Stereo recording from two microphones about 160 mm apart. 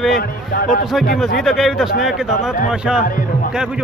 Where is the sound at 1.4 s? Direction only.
Centre (ahead or behind).